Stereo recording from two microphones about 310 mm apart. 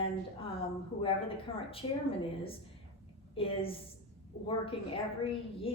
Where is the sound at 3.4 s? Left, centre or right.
Centre.